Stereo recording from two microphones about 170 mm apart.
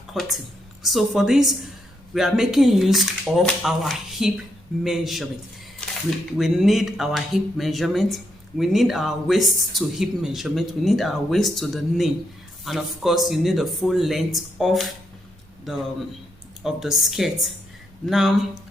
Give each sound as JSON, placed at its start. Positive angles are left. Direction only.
{"t": 0.1, "sound": "speech", "side_deg": 0}
{"t": 5.8, "sound": "a sound", "side_deg": 5}
{"t": 6.3, "sound": "speech", "side_deg": 0}